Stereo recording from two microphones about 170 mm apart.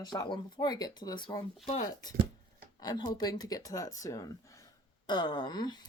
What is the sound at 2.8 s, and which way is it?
Speech, 25° left (ahead or behind).